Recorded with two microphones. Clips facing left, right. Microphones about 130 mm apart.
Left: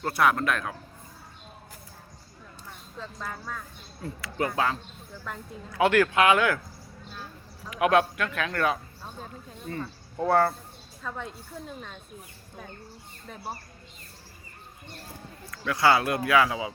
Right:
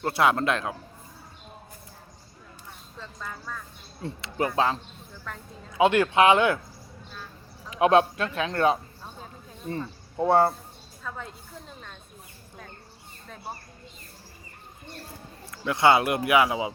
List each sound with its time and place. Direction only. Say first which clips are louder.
0.0 s speech: right 1 dB; 25° right (ahead or behind)
3.0 s speech: left 2 dB; 5° left (ahead or behind)
4.0 s speech: right 2 dB; 25° right (ahead or behind)
5.3 s speech: left 2 dB; 5° left (ahead or behind)
5.7 s speech: right 1 dB; 20° right (ahead or behind)
7.7 s speech: right 3 dB; 25° right (ahead or behind)
11.1 s speech: left 1 dB; centre (ahead or behind)
15.4 s speech: right 2 dB; 25° right (ahead or behind)